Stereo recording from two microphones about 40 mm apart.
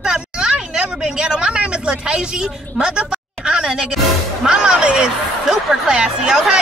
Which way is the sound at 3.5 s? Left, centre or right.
Right.